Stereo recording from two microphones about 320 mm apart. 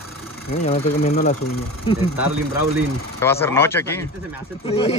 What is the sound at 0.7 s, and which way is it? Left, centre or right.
Speech, left.